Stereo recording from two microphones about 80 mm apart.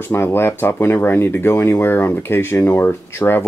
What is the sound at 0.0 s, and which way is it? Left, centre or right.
Speech, left.